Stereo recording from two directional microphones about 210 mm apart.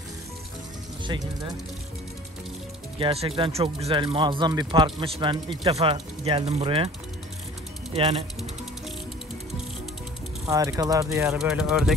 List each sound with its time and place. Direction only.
1.0 s speech: 20° right (ahead or behind)
3.0 s speech: 25° right (ahead or behind)
7.9 s speech: 25° right (ahead or behind)
10.5 s speech: 15° right (ahead or behind)
11.3 s speech: 5° right (ahead or behind)